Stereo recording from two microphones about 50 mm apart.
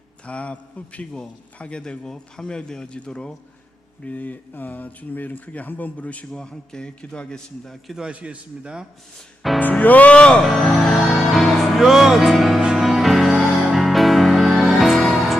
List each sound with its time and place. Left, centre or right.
0.3 s a man's voice: left
4.0 s speech: left
6.3 s a man's voice: centre
8.1 s speech: right
9.4 s speech: centre
9.8 s a man's voice: left
10.4 s speech: centre
10.8 s music: centre